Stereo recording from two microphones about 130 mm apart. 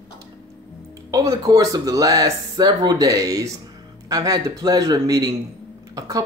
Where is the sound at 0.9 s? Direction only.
25° right (ahead or behind).